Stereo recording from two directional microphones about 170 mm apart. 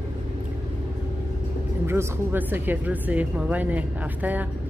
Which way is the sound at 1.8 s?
15° right (ahead or behind).